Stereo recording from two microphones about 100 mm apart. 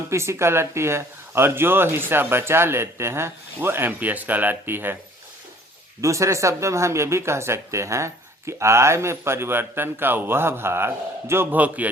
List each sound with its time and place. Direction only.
0.1 s speech: 25° right (ahead or behind)
6.0 s speech: 30° right (ahead or behind)